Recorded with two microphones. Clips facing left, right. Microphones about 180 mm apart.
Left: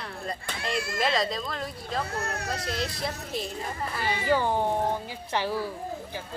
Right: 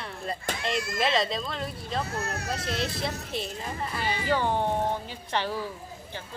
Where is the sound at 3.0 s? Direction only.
Centre (ahead or behind).